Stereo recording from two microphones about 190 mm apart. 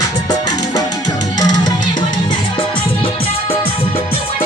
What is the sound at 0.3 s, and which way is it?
Music, 20° left (ahead or behind).